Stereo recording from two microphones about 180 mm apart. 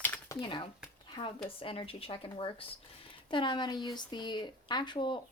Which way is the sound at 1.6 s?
30° left (ahead or behind).